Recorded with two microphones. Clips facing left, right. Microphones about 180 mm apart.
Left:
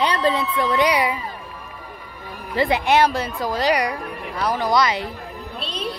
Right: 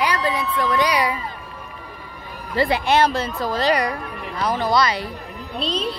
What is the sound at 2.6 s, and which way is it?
A woman's voice, 20° left (ahead or behind).